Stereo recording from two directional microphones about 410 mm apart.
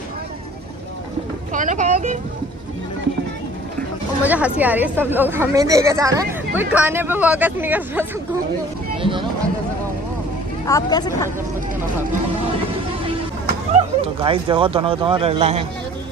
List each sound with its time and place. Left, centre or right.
1.5 s speech: centre
4.2 s a woman's voice: centre
10.7 s speech: centre
13.7 s speech: centre